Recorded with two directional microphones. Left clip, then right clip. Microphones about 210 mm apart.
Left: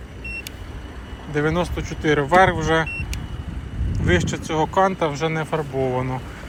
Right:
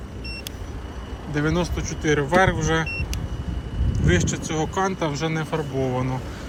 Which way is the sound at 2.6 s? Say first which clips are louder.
Left 4 dB; 15° right (ahead or behind).